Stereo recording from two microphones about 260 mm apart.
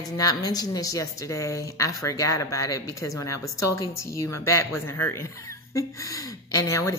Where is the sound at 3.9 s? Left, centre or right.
Left.